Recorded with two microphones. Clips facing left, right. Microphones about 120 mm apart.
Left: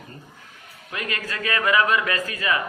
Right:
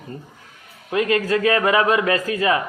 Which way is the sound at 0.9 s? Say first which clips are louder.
Right 12 dB; 25° right (ahead or behind).